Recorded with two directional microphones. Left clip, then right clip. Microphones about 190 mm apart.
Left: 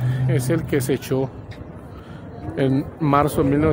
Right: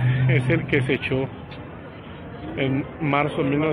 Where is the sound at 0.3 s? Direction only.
25° left (ahead or behind).